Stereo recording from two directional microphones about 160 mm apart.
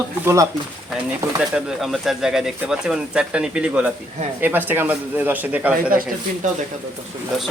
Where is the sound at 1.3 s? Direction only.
5° right (ahead or behind).